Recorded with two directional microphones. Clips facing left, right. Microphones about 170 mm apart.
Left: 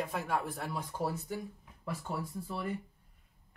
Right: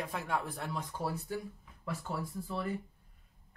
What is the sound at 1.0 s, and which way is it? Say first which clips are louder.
Speech: left 2 dB; 20° left (ahead or behind).